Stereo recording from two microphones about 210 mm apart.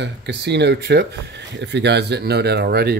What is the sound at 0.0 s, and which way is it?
Speech, 55° right (ahead or behind).